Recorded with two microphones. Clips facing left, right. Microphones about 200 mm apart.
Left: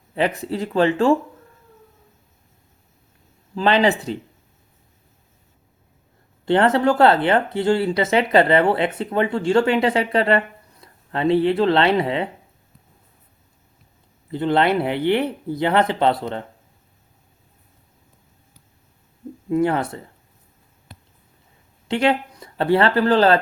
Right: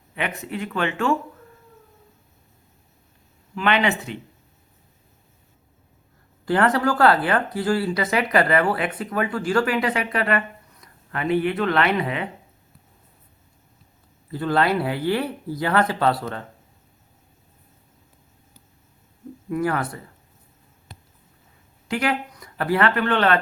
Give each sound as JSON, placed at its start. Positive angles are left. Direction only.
{"t": 0.1, "sound": "speech", "side_deg": 35}
{"t": 3.5, "sound": "speech", "side_deg": 30}
{"t": 6.4, "sound": "speech", "side_deg": 25}
{"t": 14.3, "sound": "speech", "side_deg": 20}
{"t": 19.5, "sound": "speech", "side_deg": 25}
{"t": 21.8, "sound": "speech", "side_deg": 25}